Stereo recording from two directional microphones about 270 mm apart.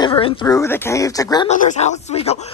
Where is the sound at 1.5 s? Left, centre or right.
Left.